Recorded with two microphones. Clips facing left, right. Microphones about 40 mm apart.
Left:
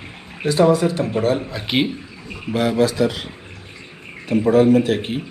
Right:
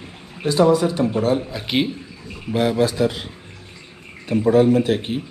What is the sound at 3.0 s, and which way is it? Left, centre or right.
Speech, left.